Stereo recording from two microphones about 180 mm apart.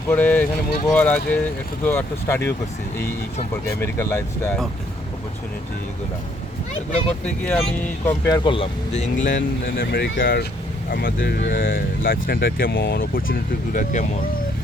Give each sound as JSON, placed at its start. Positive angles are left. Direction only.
{"t": 0.1, "sound": "speech", "side_deg": 10}
{"t": 3.7, "sound": "speech", "side_deg": 15}
{"t": 7.3, "sound": "speech", "side_deg": 5}
{"t": 8.4, "sound": "speech", "side_deg": 35}
{"t": 10.9, "sound": "speech", "side_deg": 55}